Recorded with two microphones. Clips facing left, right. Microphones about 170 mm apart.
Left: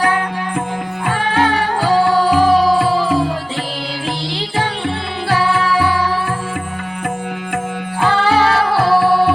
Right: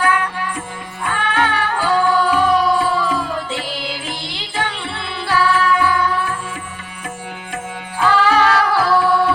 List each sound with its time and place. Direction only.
0.0 s music: 35° left (ahead or behind)
5.3 s music: 30° left (ahead or behind)
8.0 s music: 25° left (ahead or behind)